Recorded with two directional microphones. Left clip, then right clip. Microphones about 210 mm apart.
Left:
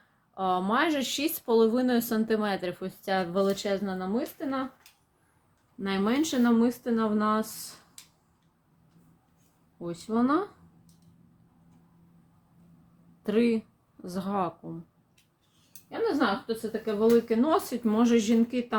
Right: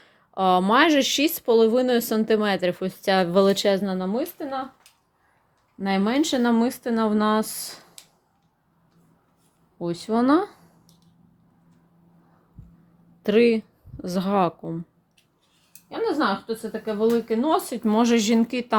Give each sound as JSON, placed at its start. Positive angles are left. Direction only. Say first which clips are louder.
{"t": 0.3, "sound": "speech", "louder": "right 8 dB", "side_deg": -35}
{"t": 5.8, "sound": "speech", "louder": "right 5 dB", "side_deg": -35}
{"t": 9.8, "sound": "speech", "louder": "right 6 dB", "side_deg": -40}
{"t": 13.2, "sound": "speech", "louder": "right 8 dB", "side_deg": -30}
{"t": 16.8, "sound": "speech", "louder": "right 1 dB", "side_deg": -20}
{"t": 17.8, "sound": "speech", "louder": "right 5 dB", "side_deg": -40}